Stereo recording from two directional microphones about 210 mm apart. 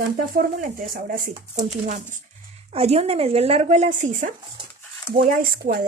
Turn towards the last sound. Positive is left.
turn(degrees=-45)  # may be behind; listen again after turning